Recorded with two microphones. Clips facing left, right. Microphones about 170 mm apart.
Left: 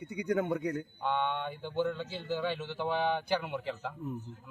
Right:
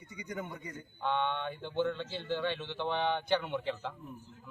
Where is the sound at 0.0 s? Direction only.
65° left (ahead or behind).